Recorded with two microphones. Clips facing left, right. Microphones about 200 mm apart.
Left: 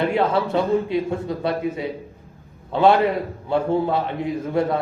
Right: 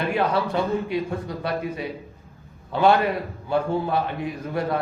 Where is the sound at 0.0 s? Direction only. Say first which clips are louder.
Left 3 dB; 25° left (ahead or behind).